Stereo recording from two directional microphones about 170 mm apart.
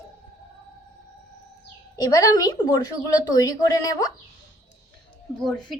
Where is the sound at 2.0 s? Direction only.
20° left (ahead or behind).